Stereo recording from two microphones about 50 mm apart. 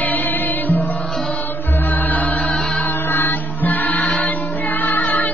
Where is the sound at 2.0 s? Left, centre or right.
Left.